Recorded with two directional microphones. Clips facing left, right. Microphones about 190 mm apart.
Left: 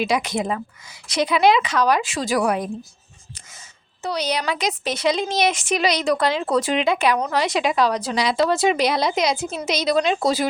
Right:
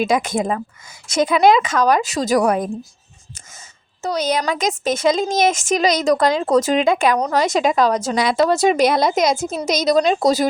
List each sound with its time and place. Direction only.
0.0 s a woman's voice: 50° right (ahead or behind)
4.0 s a woman's voice: 45° right (ahead or behind)